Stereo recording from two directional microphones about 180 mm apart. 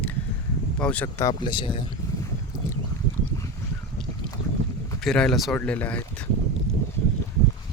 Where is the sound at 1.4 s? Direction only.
25° left (ahead or behind).